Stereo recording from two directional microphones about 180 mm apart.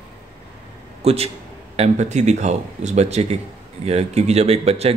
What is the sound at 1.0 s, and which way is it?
A man's voice, 35° right (ahead or behind).